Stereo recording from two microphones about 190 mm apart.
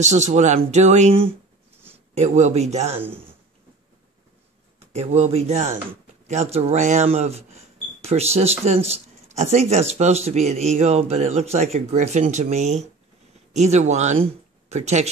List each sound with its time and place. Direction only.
0.0 s speech: 35° right (ahead or behind)
4.7 s speech: 35° right (ahead or behind)